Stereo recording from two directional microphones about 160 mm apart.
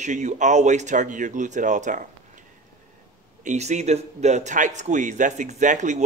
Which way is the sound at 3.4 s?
45° right (ahead or behind).